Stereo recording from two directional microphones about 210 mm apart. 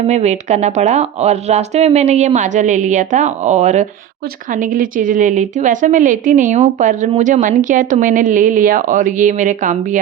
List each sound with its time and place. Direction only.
0.1 s a woman's voice: 30° right (ahead or behind)